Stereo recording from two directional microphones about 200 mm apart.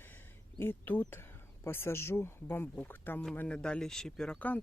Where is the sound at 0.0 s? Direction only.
10° left (ahead or behind).